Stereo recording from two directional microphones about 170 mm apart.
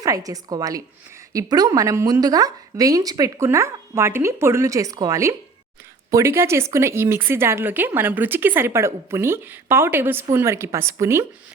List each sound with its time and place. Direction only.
0.0 s a woman's voice: 20° right (ahead or behind)